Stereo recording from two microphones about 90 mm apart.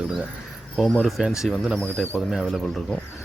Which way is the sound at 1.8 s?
15° left (ahead or behind).